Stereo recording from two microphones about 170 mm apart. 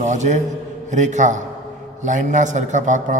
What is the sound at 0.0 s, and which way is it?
A man's voice, 45° right (ahead or behind).